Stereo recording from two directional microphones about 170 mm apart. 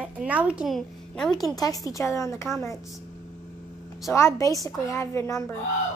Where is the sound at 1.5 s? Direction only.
20° left (ahead or behind).